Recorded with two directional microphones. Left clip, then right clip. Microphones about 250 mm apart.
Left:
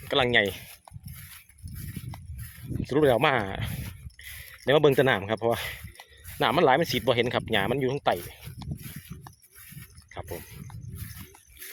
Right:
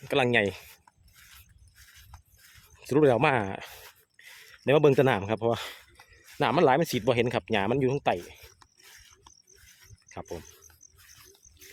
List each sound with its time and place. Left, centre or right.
0.1 s speech: centre
1.3 s a sound: left
2.8 s speech: right
8.5 s a sound: left
10.1 s wild animals: centre
10.9 s wild animals: left